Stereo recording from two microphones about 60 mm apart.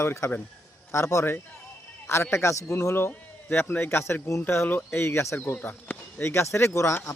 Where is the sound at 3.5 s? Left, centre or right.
Left.